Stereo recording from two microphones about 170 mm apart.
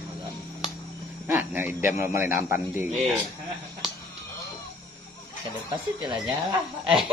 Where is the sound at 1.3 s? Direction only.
10° right (ahead or behind).